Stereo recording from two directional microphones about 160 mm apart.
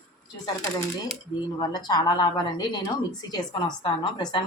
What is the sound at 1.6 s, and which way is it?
A woman's voice, 25° left (ahead or behind).